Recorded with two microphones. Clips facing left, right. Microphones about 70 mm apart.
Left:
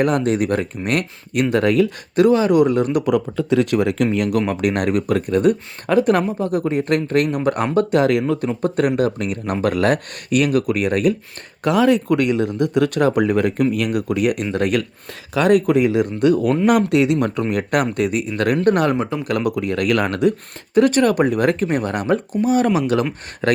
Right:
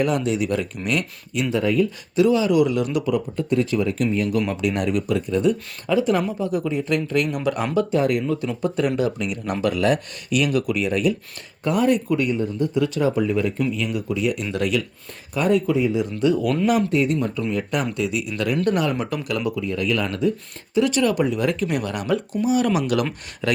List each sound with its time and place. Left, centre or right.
0.0 s speech: left
2.1 s speech: left
3.1 s speech: left
4.4 s speech: left
7.9 s speech: left
8.6 s speech: left
11.6 s speech: left
15.4 s speech: left
16.6 s speech: left
17.5 s speech: left
19.5 s speech: left
20.7 s speech: left